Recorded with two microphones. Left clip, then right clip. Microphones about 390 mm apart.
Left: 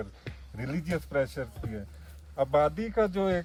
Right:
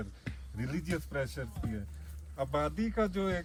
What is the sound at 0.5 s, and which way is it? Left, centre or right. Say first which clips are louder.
Speech: left 4 dB; left.